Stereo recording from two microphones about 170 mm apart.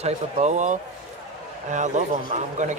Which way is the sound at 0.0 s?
45° right (ahead or behind).